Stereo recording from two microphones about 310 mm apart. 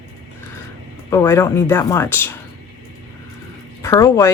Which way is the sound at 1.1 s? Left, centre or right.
Centre.